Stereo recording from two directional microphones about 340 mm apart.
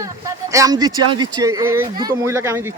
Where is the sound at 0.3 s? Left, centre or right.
Centre.